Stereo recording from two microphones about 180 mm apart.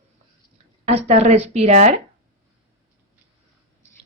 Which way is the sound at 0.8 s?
35° right (ahead or behind).